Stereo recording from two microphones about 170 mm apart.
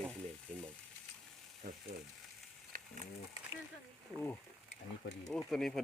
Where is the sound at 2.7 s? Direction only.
55° right (ahead or behind).